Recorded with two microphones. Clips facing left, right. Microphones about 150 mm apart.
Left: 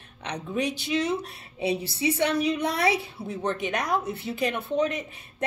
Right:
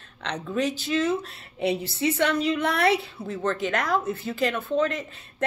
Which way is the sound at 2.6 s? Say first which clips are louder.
Right 2 dB; 60° right (ahead or behind).